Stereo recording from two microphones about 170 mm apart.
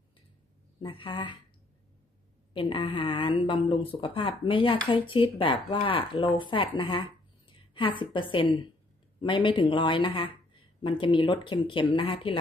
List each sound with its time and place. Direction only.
0.7 s speech: 30° left (ahead or behind)
2.5 s speech: 30° left (ahead or behind)